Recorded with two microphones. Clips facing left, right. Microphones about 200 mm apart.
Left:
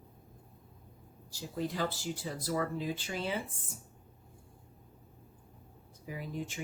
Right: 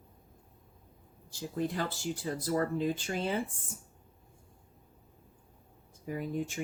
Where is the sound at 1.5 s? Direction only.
50° right (ahead or behind).